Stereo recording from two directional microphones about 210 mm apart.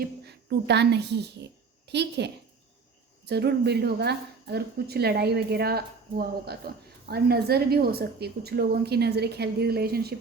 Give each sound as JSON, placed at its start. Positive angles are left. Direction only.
{"t": 0.3, "sound": "a woman's voice", "side_deg": -50}